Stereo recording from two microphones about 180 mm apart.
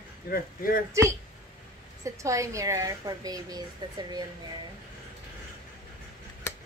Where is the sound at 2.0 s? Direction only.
15° right (ahead or behind).